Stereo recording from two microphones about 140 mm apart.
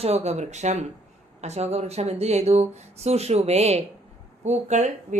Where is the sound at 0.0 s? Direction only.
50° right (ahead or behind).